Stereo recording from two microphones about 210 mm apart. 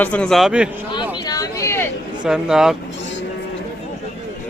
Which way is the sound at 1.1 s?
20° left (ahead or behind).